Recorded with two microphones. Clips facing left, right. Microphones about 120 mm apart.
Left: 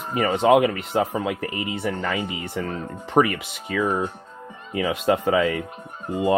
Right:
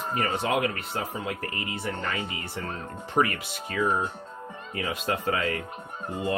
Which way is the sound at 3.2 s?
60° left (ahead or behind).